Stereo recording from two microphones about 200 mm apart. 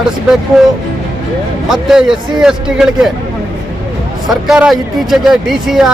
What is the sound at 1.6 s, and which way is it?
Speech, centre (ahead or behind).